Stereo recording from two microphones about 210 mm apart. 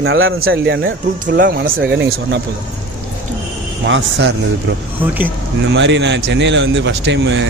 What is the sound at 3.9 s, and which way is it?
Speech, 60° right (ahead or behind).